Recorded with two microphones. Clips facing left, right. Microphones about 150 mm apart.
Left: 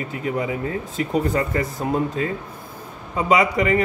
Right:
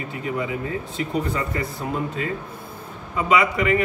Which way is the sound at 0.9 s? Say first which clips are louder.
Left 5 dB; 45° left (ahead or behind).